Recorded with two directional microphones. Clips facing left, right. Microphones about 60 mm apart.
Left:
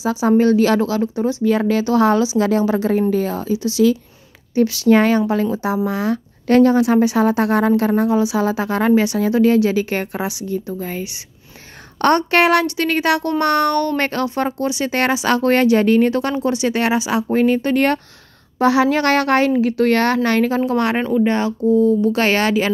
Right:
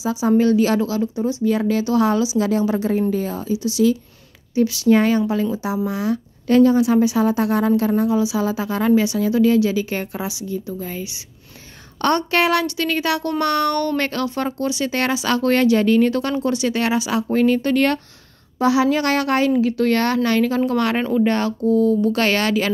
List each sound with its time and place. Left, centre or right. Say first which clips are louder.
0.0 s a woman's voice: left 2 dB; left
18.6 s a woman's voice: left 2 dB; left
20.6 s speech: left 1 dB; centre
21.0 s speech: left 1 dB; centre
21.3 s speech: left 2 dB; centre